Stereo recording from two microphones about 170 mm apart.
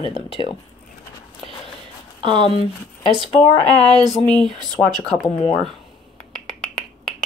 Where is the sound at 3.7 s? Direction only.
25° right (ahead or behind).